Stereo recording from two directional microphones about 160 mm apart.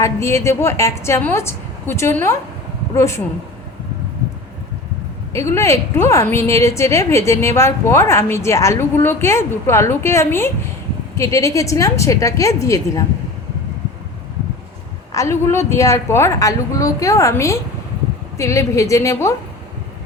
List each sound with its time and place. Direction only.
0.0 s a woman's voice: 20° left (ahead or behind)
5.3 s a woman's voice: 15° left (ahead or behind)
15.1 s a woman's voice: 20° left (ahead or behind)